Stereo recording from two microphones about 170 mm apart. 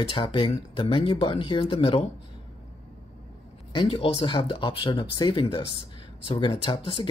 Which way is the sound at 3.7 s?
30° left (ahead or behind).